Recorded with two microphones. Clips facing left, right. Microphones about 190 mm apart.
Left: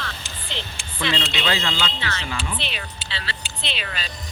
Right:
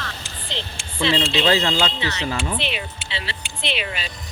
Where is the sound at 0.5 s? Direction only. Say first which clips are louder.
Right 2 dB; 20° right (ahead or behind).